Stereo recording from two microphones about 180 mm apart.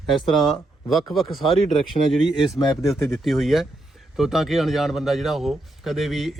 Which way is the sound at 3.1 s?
Centre (ahead or behind).